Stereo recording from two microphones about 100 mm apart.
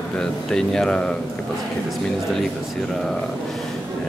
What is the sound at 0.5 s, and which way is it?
Speech, 5° left (ahead or behind).